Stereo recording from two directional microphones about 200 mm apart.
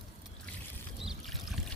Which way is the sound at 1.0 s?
Centre (ahead or behind).